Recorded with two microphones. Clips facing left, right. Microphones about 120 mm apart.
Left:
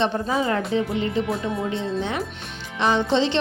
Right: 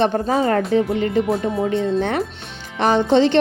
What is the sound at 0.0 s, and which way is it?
A woman's voice, 50° right (ahead or behind).